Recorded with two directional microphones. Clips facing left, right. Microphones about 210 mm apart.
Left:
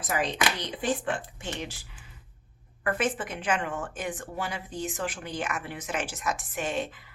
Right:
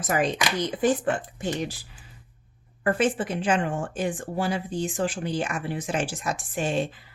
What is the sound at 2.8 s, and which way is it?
A woman's voice, 30° right (ahead or behind).